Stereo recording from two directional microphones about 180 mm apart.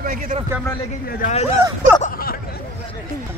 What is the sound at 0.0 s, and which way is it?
Speech, 55° right (ahead or behind).